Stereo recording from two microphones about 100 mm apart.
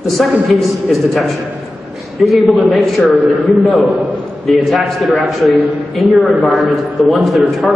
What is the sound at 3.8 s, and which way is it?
Speech, 15° right (ahead or behind).